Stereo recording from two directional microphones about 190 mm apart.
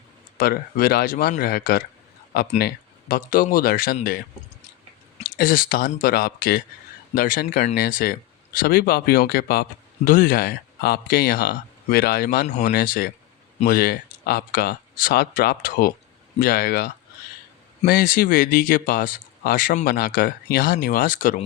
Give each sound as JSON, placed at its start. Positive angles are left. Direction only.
{"t": 0.3, "sound": "speech", "side_deg": 55}
{"t": 5.2, "sound": "speech", "side_deg": 45}